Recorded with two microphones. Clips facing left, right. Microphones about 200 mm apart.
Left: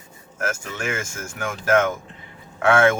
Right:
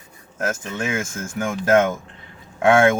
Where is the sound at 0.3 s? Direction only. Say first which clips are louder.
Right 3 dB; 20° right (ahead or behind).